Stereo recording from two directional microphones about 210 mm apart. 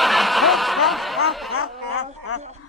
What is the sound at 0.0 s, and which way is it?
Snicker, centre (ahead or behind).